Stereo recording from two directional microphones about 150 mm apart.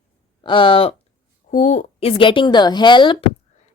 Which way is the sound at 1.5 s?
55° left (ahead or behind).